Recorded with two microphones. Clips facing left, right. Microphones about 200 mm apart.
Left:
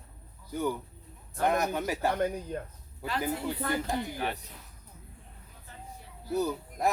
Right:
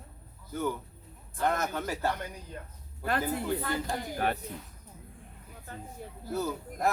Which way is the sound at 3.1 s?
55° right (ahead or behind).